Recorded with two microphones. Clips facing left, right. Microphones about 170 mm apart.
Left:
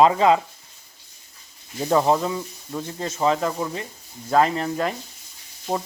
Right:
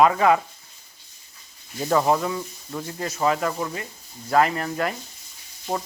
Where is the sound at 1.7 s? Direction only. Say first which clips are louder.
Left 1 dB; 10° left (ahead or behind).